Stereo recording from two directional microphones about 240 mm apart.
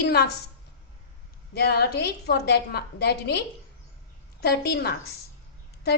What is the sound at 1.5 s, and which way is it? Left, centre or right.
A woman's voice, left.